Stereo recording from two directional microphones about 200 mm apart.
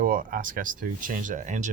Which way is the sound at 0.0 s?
45° right (ahead or behind).